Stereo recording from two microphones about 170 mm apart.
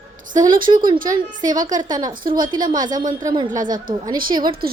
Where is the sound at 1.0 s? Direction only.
50° right (ahead or behind).